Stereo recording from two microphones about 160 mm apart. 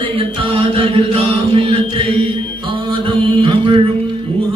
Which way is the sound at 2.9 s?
30° right (ahead or behind).